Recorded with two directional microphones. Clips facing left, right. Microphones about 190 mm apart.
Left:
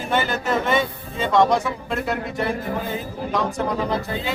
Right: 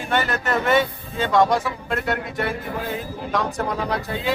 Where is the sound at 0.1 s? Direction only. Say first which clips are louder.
Left 1 dB; centre (ahead or behind).